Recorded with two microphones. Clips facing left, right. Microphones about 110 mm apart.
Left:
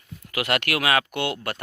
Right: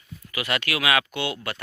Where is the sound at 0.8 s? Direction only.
40° left (ahead or behind).